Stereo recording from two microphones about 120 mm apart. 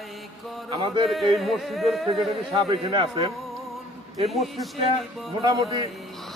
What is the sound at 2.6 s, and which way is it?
Speech, 45° right (ahead or behind).